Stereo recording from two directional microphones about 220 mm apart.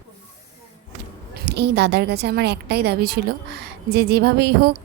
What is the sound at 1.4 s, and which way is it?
A woman's voice, 50° right (ahead or behind).